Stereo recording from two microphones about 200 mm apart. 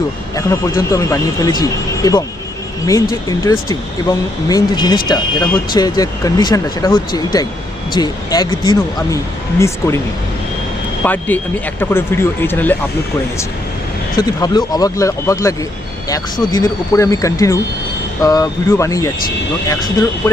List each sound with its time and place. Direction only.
0.3 s speech: 15° left (ahead or behind)
11.0 s speech: 10° left (ahead or behind)
14.2 s speech: 20° left (ahead or behind)